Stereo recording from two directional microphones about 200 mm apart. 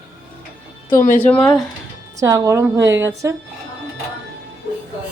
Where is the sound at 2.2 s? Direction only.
15° right (ahead or behind).